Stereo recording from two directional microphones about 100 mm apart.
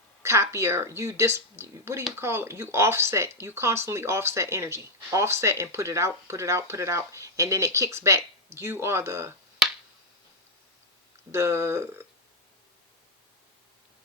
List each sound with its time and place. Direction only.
0.2 s speech: 30° right (ahead or behind)
11.3 s speech: 25° right (ahead or behind)